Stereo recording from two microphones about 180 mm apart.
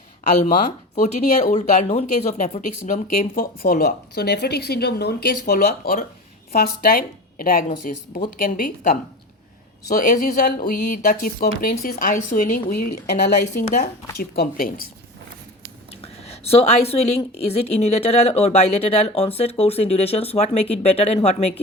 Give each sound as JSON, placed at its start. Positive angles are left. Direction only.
{"t": 0.9, "sound": "speech", "side_deg": 40}
{"t": 14.2, "sound": "speech", "side_deg": 55}
{"t": 15.9, "sound": "a woman's voice", "side_deg": 35}